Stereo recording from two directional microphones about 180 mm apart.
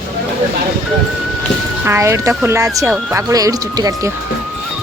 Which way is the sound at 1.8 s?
15° right (ahead or behind).